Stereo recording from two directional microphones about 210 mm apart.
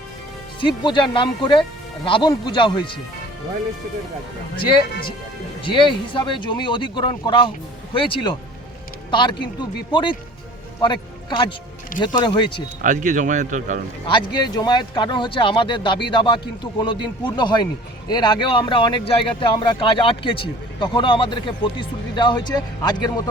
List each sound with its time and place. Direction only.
0.9 s speech: 25° left (ahead or behind)
5.6 s speech: 25° left (ahead or behind)
12.8 s speech: 40° right (ahead or behind)
14.1 s speech: 20° left (ahead or behind)